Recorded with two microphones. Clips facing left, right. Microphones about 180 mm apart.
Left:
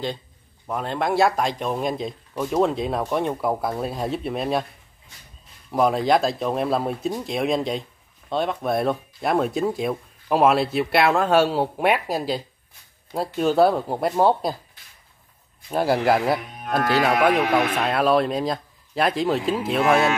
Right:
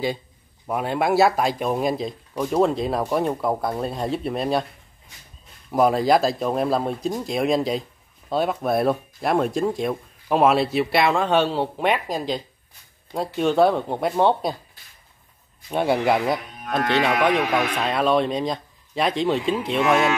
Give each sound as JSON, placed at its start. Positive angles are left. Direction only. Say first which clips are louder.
{"t": 0.7, "sound": "speech", "louder": "right 3 dB", "side_deg": -10}
{"t": 5.7, "sound": "speech", "louder": "right 1 dB", "side_deg": 0}
{"t": 15.7, "sound": "speech", "louder": "even", "side_deg": 0}